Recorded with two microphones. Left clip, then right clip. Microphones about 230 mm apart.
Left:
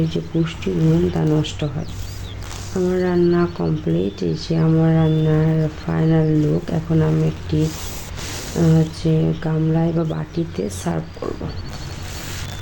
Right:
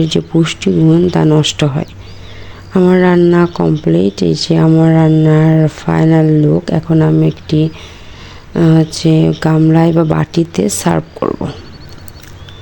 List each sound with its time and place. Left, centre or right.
0.0 s speech: right
8.6 s speech: right